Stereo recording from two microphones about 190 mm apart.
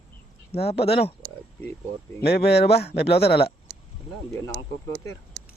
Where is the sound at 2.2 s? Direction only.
60° left (ahead or behind).